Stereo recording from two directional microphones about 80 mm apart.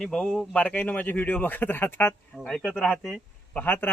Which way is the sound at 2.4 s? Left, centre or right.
Centre.